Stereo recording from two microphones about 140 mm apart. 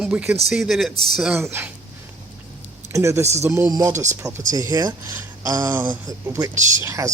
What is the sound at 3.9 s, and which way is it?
Speech, 60° right (ahead or behind).